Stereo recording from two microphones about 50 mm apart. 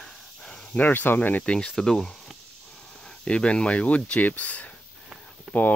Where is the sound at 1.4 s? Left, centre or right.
Left.